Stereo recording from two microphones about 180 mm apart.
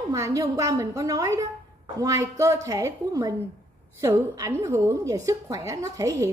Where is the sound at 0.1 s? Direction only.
20° right (ahead or behind).